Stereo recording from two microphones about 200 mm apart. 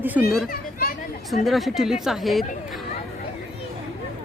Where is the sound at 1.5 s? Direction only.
Centre (ahead or behind).